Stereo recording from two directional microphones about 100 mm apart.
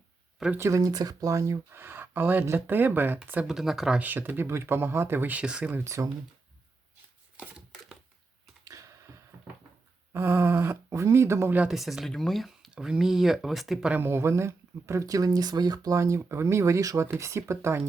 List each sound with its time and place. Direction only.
0.5 s speech: 30° right (ahead or behind)
3.4 s speech: 5° right (ahead or behind)
4.0 s speech: 20° right (ahead or behind)
5.8 s speech: 30° right (ahead or behind)
7.3 s a sound: 5° right (ahead or behind)
8.6 s a sound: 35° right (ahead or behind)
10.1 s speech: 25° right (ahead or behind)
11.7 s speech: centre (ahead or behind)
13.9 s speech: 25° right (ahead or behind)